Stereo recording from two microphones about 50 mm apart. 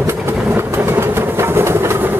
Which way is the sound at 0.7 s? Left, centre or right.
Right.